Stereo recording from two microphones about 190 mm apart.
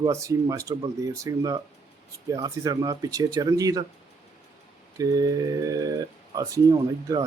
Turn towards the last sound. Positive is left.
turn(degrees=-20)  # may be behind; listen again after turning